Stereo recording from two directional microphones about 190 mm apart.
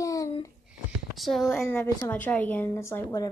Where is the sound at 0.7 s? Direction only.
Centre (ahead or behind).